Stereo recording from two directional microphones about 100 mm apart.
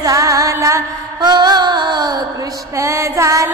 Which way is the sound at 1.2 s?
45° right (ahead or behind).